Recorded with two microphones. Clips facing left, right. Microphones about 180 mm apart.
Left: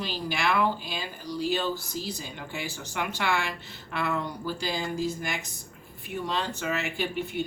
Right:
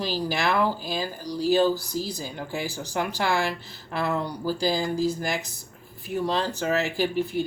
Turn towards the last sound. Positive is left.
turn(degrees=-35)  # may be behind; listen again after turning